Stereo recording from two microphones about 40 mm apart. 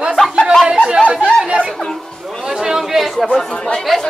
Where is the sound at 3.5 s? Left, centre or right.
Left.